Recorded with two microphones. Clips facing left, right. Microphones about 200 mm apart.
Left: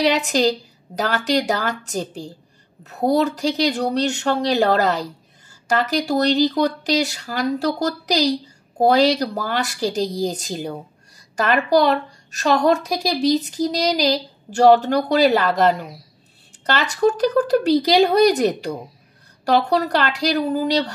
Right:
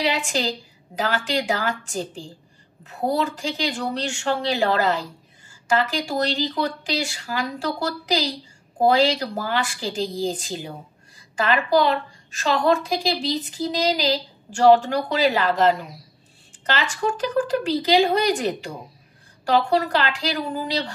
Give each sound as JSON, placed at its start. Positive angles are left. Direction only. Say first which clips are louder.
{"t": 0.0, "sound": "a woman's voice", "louder": "left 6 dB", "side_deg": 40}